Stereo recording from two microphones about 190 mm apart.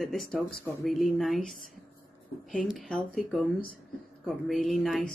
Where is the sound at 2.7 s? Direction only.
Centre (ahead or behind).